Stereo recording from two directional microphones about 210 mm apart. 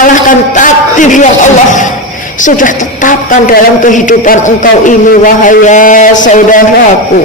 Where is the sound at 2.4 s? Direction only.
40° left (ahead or behind).